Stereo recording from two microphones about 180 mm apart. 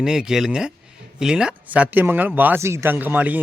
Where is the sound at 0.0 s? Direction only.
5° right (ahead or behind).